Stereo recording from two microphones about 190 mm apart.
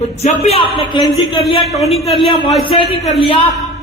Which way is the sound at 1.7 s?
Centre (ahead or behind).